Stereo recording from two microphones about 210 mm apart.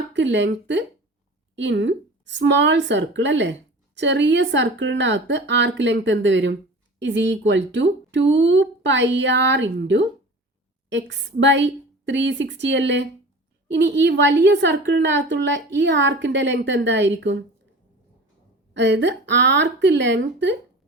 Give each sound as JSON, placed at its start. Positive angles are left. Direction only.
{"t": 0.1, "sound": "speech", "side_deg": -60}
{"t": 18.7, "sound": "speech", "side_deg": -60}